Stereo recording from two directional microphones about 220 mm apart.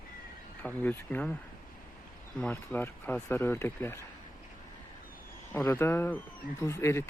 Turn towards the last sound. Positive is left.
turn(degrees=10)  # may be behind; listen again after turning